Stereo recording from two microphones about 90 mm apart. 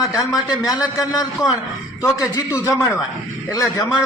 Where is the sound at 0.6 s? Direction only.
45° left (ahead or behind).